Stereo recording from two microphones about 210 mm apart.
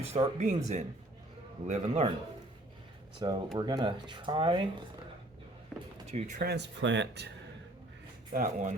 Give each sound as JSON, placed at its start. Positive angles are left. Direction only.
{"t": 0.1, "sound": "speech", "side_deg": -30}
{"t": 3.2, "sound": "speech", "side_deg": -20}
{"t": 5.7, "sound": "door", "side_deg": 5}
{"t": 6.1, "sound": "speech", "side_deg": -30}
{"t": 6.5, "sound": "speech", "side_deg": -55}
{"t": 8.3, "sound": "speech", "side_deg": -40}